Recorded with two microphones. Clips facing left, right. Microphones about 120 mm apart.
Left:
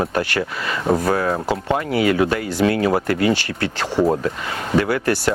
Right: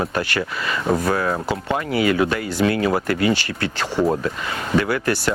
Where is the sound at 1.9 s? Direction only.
45° left (ahead or behind).